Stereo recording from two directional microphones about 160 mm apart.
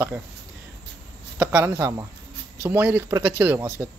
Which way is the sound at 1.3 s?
15° right (ahead or behind).